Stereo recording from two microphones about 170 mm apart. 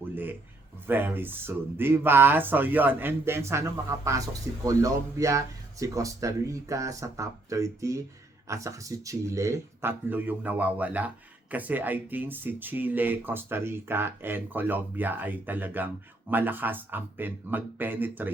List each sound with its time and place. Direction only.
0.1 s speech: 10° right (ahead or behind)